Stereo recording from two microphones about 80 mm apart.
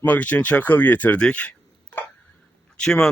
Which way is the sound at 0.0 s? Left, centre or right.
Centre.